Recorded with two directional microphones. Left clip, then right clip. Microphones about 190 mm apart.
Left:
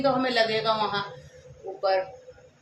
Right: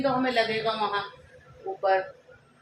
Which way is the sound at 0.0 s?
15° left (ahead or behind).